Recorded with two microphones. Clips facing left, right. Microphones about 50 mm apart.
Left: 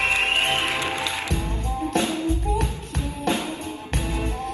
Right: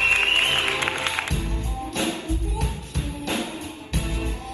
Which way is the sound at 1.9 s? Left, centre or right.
Left.